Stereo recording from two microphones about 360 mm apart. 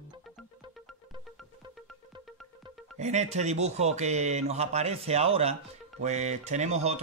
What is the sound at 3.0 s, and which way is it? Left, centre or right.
Speech, centre.